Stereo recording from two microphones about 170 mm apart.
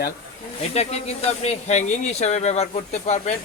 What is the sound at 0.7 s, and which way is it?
Speech, 40° left (ahead or behind).